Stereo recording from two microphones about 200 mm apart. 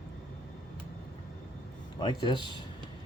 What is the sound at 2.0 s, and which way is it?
Speech, 25° left (ahead or behind).